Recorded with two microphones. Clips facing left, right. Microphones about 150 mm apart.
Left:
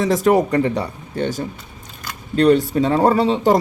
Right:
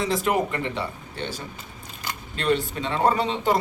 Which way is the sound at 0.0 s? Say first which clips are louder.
Left 8 dB; 45° left (ahead or behind).